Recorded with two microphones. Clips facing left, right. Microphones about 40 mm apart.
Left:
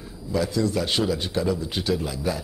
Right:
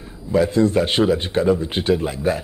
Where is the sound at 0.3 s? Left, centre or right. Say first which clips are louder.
Right 7 dB; right.